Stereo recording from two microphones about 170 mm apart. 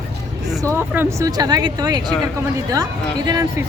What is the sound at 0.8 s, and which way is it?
Speech, 15° right (ahead or behind).